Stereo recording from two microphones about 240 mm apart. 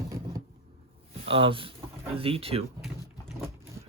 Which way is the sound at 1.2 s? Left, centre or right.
Right.